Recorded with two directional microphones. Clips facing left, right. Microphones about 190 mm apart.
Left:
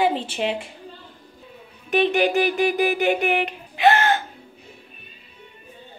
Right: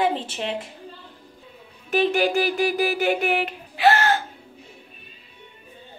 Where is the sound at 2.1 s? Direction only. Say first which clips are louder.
Left 2 dB; 20° left (ahead or behind).